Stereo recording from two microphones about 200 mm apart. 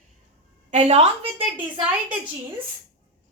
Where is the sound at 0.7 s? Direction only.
35° right (ahead or behind).